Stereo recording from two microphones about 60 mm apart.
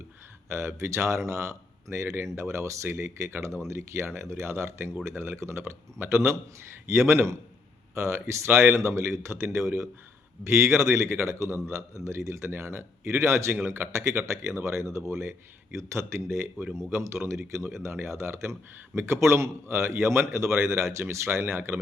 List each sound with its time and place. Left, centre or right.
0.5 s speech: right
21.4 s speech: right